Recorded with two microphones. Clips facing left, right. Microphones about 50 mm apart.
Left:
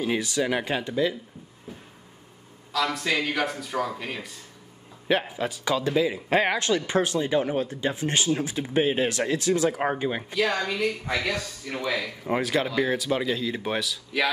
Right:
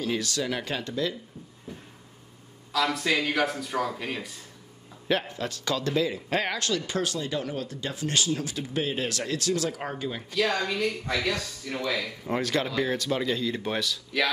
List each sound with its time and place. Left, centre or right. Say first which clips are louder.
0.0 s speech: left 3 dB; centre
1.7 s a sound: even; centre
2.7 s a man's voice: even; centre
5.0 s speech: left 3 dB; centre
10.3 s speech: right 1 dB; centre